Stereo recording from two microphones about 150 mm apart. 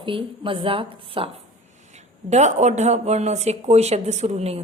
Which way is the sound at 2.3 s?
50° right (ahead or behind).